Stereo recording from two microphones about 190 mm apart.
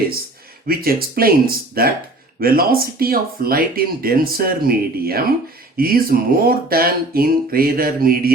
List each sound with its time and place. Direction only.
0.7 s speech: 50° right (ahead or behind)